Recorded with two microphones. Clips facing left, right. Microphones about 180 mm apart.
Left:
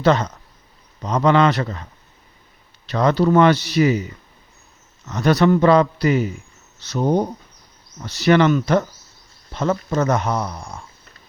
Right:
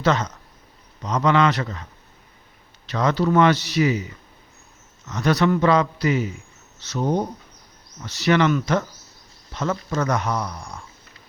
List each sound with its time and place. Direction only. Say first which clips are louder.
0.0 s a man's voice: left 4 dB; 35° left (ahead or behind)
2.9 s a man's voice: left 4 dB; 35° left (ahead or behind)